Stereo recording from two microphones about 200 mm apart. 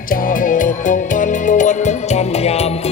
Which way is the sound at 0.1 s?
45° left (ahead or behind).